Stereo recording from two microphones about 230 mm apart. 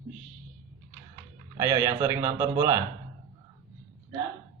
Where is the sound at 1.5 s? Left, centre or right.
Centre.